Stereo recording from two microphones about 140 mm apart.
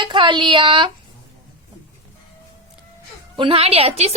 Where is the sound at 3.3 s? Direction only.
40° right (ahead or behind).